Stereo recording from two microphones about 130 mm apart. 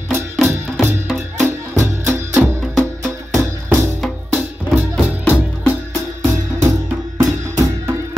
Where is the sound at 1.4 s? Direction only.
20° right (ahead or behind).